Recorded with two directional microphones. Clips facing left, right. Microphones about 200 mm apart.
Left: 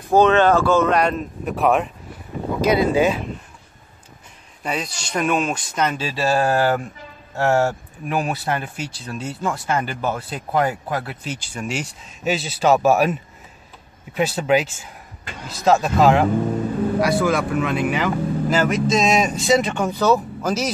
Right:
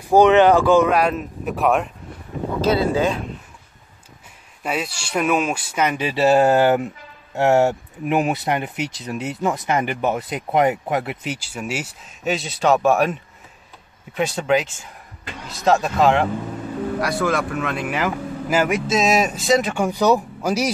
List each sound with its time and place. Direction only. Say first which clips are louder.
0.1 s speech: right 2 dB; 15° right (ahead or behind)
0.9 s speech: even; 5° right (ahead or behind)
2.6 s speech: left 2 dB; 15° left (ahead or behind)
4.6 s speech: right 1 dB; 5° right (ahead or behind)
11.3 s speech: even; 5° right (ahead or behind)